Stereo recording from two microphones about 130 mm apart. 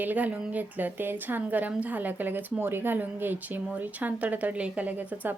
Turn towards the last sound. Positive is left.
turn(degrees=-10)  # may be behind; listen again after turning